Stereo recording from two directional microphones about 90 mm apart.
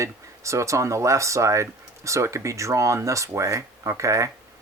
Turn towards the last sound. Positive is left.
turn(degrees=-35)  # may be behind; listen again after turning